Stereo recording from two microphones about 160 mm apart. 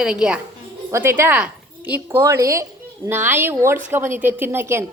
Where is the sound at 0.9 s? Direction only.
15° right (ahead or behind).